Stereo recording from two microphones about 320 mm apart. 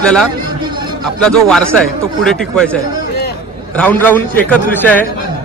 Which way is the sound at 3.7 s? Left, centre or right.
Centre.